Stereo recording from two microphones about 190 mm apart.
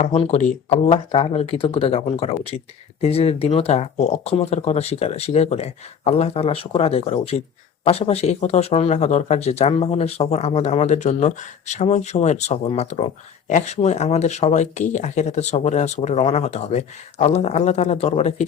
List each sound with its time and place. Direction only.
0.0 s speech: 35° left (ahead or behind)